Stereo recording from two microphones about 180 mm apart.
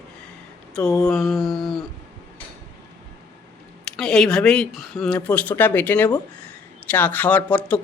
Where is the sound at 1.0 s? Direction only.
Centre (ahead or behind).